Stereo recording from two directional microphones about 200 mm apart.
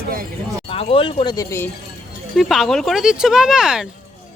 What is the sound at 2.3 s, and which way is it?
Speech, centre (ahead or behind).